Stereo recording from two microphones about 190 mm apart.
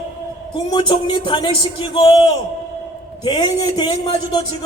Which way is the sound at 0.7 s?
25° left (ahead or behind).